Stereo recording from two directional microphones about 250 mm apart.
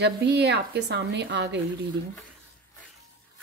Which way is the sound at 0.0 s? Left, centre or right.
Right.